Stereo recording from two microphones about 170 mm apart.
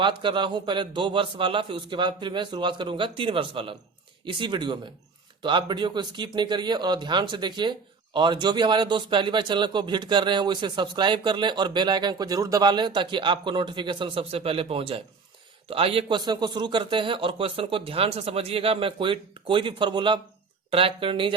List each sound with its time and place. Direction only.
0.0 s a man's voice: 30° right (ahead or behind)